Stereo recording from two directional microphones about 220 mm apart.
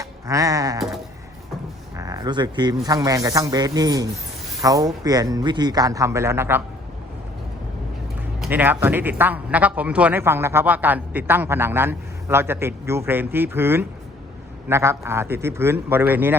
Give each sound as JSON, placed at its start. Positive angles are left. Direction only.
{"t": 0.0, "sound": "a sound", "side_deg": -15}
{"t": 2.0, "sound": "speech", "side_deg": -15}
{"t": 8.4, "sound": "speech", "side_deg": -10}